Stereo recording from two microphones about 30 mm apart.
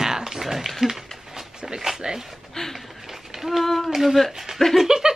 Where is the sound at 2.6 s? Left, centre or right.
Centre.